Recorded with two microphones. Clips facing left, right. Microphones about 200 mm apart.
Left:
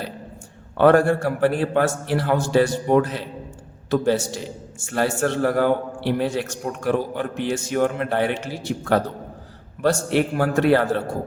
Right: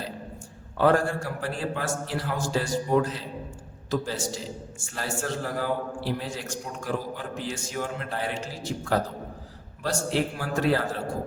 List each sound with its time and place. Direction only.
0.8 s a man's voice: 65° left (ahead or behind)